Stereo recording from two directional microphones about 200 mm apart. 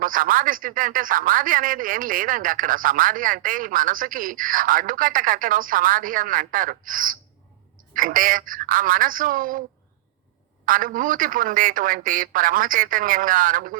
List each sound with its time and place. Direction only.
0.0 s speech: 45° right (ahead or behind)
10.7 s speech: 45° right (ahead or behind)